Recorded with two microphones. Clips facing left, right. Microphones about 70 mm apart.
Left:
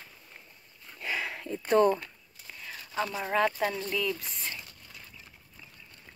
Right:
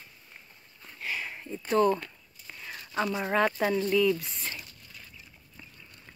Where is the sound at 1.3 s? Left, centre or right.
Left.